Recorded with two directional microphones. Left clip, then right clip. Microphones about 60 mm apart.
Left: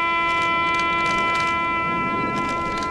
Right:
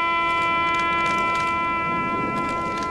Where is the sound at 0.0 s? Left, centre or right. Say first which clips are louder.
Left 1 dB; centre.